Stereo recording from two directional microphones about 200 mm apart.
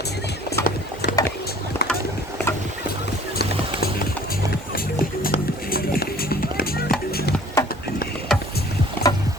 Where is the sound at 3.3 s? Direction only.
50° left (ahead or behind).